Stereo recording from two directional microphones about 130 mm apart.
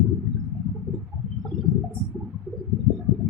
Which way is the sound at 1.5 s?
Centre (ahead or behind).